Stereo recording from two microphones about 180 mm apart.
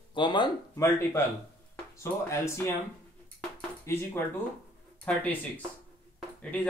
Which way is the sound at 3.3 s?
15° left (ahead or behind).